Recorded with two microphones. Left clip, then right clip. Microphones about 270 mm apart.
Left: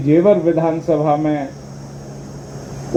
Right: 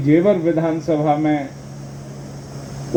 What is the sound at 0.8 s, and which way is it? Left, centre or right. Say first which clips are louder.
Speech: even; right.